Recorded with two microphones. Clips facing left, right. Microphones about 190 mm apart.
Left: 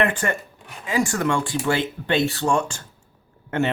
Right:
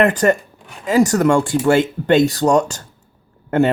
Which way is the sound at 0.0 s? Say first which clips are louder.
Right 8 dB; 40° right (ahead or behind).